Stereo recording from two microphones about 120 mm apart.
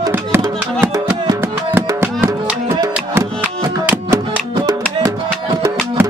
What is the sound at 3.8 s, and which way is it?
Music, 15° right (ahead or behind).